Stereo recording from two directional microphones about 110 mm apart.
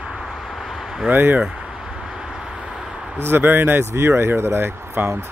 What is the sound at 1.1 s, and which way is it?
Speech, 15° right (ahead or behind).